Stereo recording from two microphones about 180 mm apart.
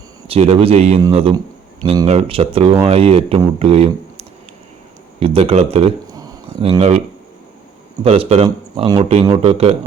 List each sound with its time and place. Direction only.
0.3 s speech: 30° right (ahead or behind)
8.0 s speech: 30° right (ahead or behind)